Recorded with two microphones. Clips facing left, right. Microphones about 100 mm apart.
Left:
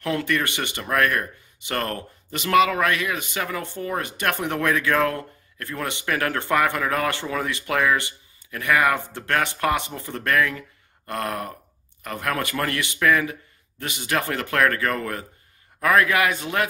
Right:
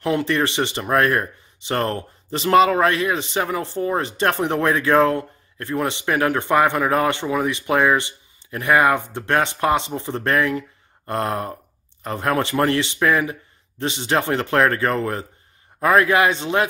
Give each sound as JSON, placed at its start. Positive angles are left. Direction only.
{"t": 0.0, "sound": "speech", "side_deg": -25}